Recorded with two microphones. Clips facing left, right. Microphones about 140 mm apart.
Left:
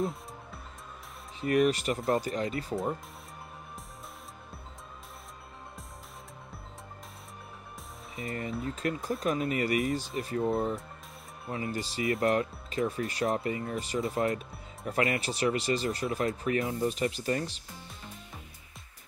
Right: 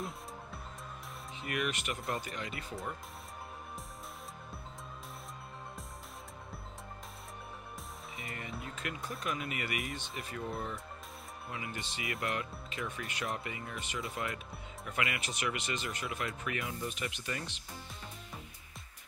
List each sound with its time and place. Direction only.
1.4 s speech: 35° left (ahead or behind)
8.3 s speech: 35° left (ahead or behind)